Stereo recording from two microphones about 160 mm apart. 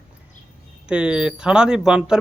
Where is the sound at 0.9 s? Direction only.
5° right (ahead or behind).